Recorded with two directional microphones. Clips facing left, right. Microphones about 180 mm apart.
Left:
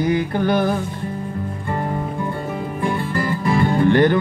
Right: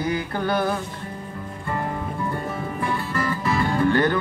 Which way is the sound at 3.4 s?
25° left (ahead or behind).